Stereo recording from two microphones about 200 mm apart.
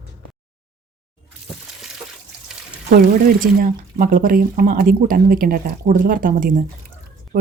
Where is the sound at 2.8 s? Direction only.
45° right (ahead or behind).